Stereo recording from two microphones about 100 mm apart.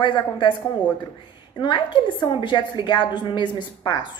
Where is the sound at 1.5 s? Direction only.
50° left (ahead or behind).